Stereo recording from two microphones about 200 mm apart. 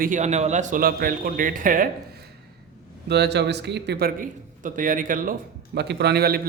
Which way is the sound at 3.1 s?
55° right (ahead or behind).